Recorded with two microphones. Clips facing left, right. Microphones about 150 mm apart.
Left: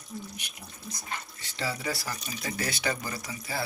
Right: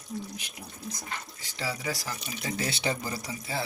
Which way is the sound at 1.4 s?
10° right (ahead or behind).